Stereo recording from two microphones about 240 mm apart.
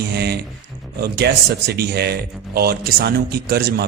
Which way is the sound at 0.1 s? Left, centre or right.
Right.